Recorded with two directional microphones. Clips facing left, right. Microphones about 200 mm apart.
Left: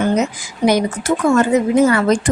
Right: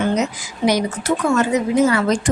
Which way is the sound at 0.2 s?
50° left (ahead or behind).